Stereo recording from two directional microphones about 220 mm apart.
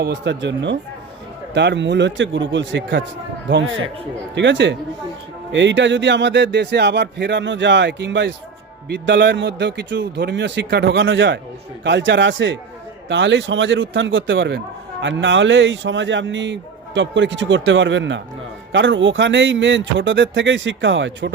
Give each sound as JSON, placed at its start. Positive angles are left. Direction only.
{"t": 0.0, "sound": "a man's voice", "side_deg": -55}
{"t": 4.4, "sound": "a man's voice", "side_deg": -55}